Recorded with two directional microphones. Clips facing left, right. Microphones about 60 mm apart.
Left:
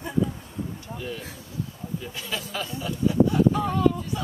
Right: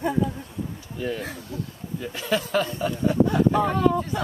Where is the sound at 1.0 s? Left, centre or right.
Right.